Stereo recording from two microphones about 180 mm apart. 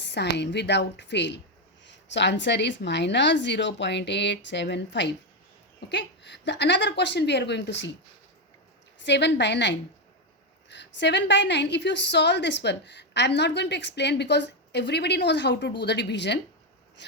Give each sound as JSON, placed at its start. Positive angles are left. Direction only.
{"t": 0.0, "sound": "a woman's voice", "side_deg": 75}
{"t": 9.0, "sound": "a woman's voice", "side_deg": 75}